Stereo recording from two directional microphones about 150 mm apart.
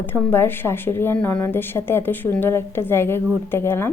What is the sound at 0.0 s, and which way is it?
Speech, 10° left (ahead or behind).